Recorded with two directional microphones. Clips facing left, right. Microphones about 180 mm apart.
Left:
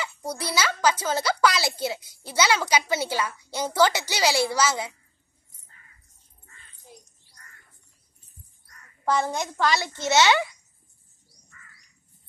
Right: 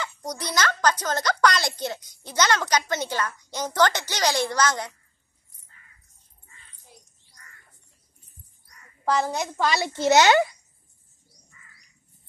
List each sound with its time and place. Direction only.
0.0 s a child's voice: 5° left (ahead or behind)
8.6 s a sound: centre (ahead or behind)
10.1 s a child's voice: 40° right (ahead or behind)